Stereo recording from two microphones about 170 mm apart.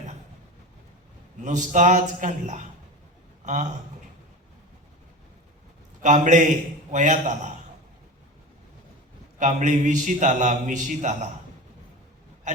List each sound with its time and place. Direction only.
1.4 s a man's voice: 45° right (ahead or behind)
6.0 s a man's voice: 45° right (ahead or behind)
9.4 s a man's voice: 45° right (ahead or behind)